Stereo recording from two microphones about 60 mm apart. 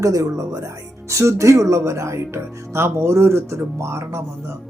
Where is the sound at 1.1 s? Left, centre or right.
Right.